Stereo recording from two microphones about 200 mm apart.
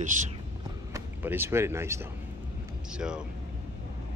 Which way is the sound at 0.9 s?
10° right (ahead or behind).